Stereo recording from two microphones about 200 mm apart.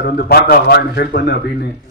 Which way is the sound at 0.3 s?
50° left (ahead or behind).